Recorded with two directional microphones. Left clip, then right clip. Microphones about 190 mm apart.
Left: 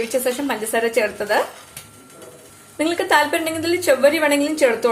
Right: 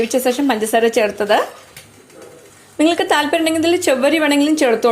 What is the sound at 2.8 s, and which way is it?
A woman's voice, 35° right (ahead or behind).